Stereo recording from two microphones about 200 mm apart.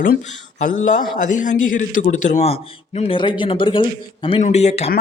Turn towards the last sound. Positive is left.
turn(degrees=30)  # may be behind; listen again after turning